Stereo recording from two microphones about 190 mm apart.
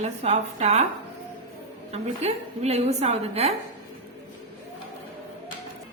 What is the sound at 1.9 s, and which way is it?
A woman's voice, 35° right (ahead or behind).